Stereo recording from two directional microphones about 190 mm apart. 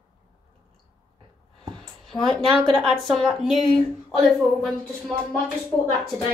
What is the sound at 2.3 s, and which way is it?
Speech, centre (ahead or behind).